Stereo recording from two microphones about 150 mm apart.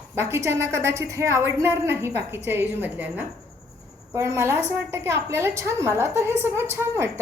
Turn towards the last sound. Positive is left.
turn(degrees=-15)  # may be behind; listen again after turning